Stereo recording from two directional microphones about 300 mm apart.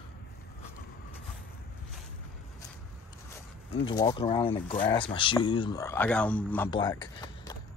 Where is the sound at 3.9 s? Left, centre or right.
Centre.